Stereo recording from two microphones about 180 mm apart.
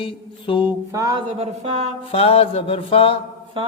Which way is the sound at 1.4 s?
35° right (ahead or behind).